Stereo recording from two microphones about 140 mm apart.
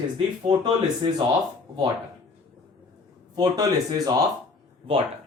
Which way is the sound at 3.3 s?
30° right (ahead or behind).